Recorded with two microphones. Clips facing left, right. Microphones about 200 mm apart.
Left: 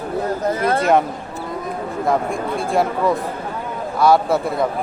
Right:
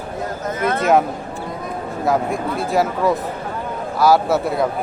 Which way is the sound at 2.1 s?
Centre (ahead or behind).